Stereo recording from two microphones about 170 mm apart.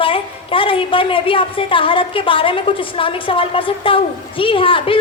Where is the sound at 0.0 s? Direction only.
30° left (ahead or behind).